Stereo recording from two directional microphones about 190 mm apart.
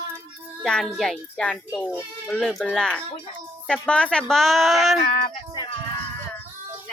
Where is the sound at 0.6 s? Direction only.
Centre (ahead or behind).